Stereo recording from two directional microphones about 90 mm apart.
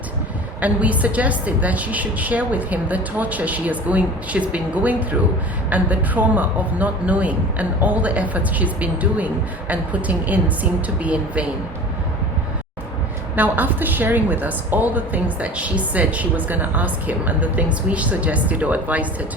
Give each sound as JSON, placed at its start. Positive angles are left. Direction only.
{"t": 0.6, "sound": "a woman's voice", "side_deg": -15}
{"t": 13.3, "sound": "a woman's voice", "side_deg": -20}